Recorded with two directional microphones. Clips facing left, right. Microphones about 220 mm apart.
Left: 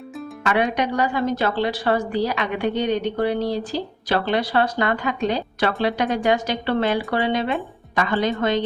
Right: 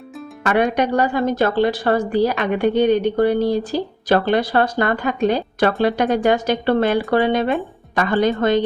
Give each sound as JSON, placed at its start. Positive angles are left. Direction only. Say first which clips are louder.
{"t": 0.4, "sound": "a woman's voice", "louder": "right 4 dB", "side_deg": -50}